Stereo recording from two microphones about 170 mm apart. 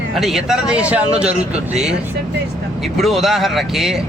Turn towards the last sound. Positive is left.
turn(degrees=0)  # may be behind; listen again after turning